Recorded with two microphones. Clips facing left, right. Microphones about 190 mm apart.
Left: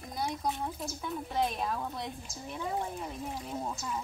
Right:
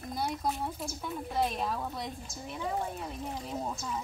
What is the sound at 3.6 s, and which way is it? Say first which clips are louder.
Speech: even; 5° right (ahead or behind).